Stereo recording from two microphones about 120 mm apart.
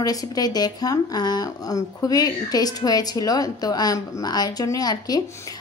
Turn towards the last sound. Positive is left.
turn(degrees=35)  # may be behind; listen again after turning